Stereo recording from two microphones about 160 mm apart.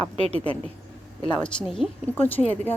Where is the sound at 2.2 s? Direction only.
10° left (ahead or behind).